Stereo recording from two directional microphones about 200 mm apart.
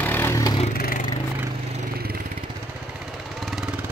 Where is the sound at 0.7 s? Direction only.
45° left (ahead or behind).